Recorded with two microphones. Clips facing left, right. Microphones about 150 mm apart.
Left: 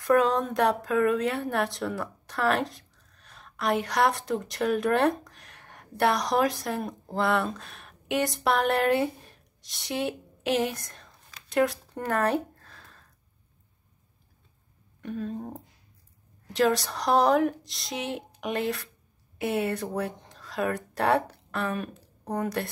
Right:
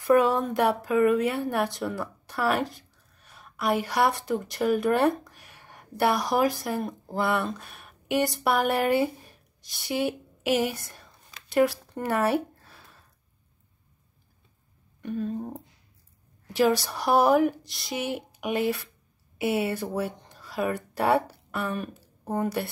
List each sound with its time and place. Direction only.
0.0 s a woman's voice: 5° right (ahead or behind)
11.4 s a sound: 5° right (ahead or behind)
15.0 s a woman's voice: centre (ahead or behind)